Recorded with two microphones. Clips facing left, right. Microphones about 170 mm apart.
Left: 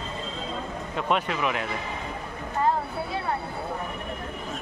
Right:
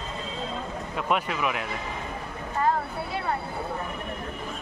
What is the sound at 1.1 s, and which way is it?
Speech, 5° right (ahead or behind).